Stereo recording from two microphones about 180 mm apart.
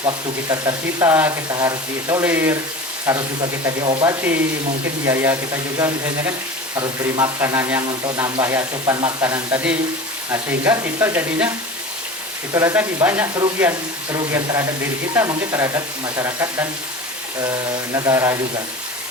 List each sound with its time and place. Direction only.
0.0 s speech: 20° right (ahead or behind)
6.7 s speech: 20° right (ahead or behind)
12.5 s speech: 15° right (ahead or behind)
14.1 s speech: 20° right (ahead or behind)
17.9 s speech: 15° right (ahead or behind)